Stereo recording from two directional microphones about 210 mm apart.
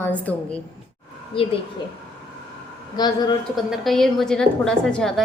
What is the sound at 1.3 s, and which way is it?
Speech, 25° left (ahead or behind).